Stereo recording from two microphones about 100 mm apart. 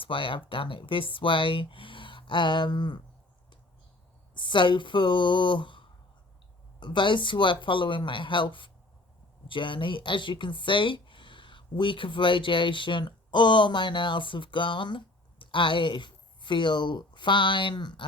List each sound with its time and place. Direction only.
0.0 s speech: 60° left (ahead or behind)
4.4 s speech: 55° left (ahead or behind)